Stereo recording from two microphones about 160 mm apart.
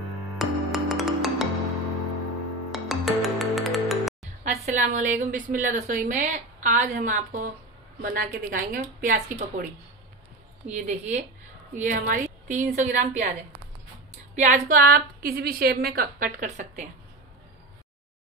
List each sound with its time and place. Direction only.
0.4 s music: centre (ahead or behind)
2.7 s music: centre (ahead or behind)
4.4 s a woman's voice: 50° right (ahead or behind)
10.7 s a woman's voice: 50° right (ahead or behind)
14.3 s a woman's voice: 50° right (ahead or behind)